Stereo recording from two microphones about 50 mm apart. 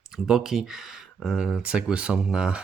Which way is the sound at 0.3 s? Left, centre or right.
Centre.